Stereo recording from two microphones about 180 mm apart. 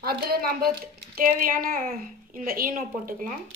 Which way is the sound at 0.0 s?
55° right (ahead or behind).